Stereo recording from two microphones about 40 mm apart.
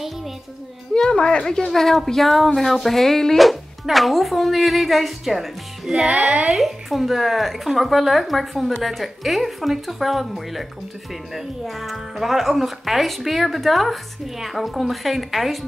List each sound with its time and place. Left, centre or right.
1.1 s a woman's voice: centre
1.7 s speech: centre